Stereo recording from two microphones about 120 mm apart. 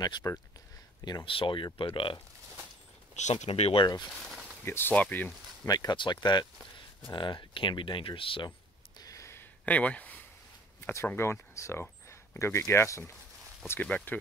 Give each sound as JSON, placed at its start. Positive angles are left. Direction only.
{"t": 0.0, "sound": "speech", "side_deg": 30}
{"t": 1.2, "sound": "speech", "side_deg": 45}
{"t": 3.2, "sound": "speech", "side_deg": 75}
{"t": 3.4, "sound": "speech", "side_deg": 55}
{"t": 3.8, "sound": "speech", "side_deg": 35}
{"t": 4.6, "sound": "speech", "side_deg": 15}
{"t": 5.7, "sound": "speech", "side_deg": 35}
{"t": 7.1, "sound": "a sound", "side_deg": 40}
{"t": 11.1, "sound": "speech", "side_deg": 20}
{"t": 13.7, "sound": "speech", "side_deg": 10}